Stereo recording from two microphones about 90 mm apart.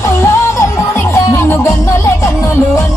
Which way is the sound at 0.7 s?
35° left (ahead or behind).